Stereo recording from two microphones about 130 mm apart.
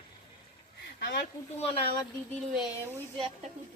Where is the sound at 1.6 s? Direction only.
45° left (ahead or behind).